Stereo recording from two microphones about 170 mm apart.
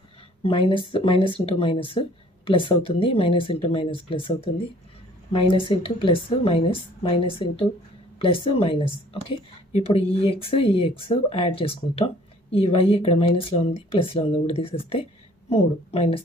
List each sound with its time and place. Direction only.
0.4 s speech: 30° left (ahead or behind)
5.3 s speech: 30° left (ahead or behind)